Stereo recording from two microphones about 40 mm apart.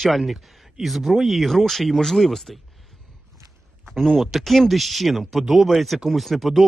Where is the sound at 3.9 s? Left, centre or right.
Centre.